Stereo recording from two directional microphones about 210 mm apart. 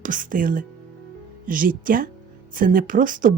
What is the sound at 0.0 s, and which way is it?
Speech, 40° right (ahead or behind).